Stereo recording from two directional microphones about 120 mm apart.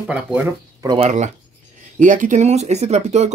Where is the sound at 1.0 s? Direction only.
80° right.